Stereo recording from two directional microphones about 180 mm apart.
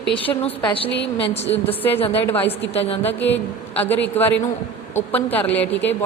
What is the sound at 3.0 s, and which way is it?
A man's voice, 10° left (ahead or behind).